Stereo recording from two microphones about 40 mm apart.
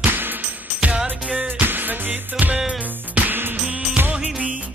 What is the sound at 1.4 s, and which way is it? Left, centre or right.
Music, right.